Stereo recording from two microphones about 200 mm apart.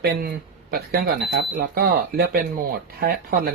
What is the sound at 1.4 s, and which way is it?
Speech, 50° right (ahead or behind).